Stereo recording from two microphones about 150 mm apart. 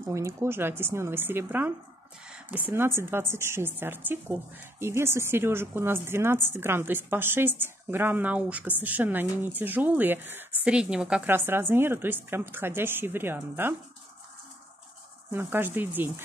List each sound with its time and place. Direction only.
0.0 s a woman's voice: 20° right (ahead or behind)
15.3 s a woman's voice: 15° right (ahead or behind)